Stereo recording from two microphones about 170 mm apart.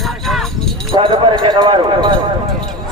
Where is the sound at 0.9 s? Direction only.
25° right (ahead or behind).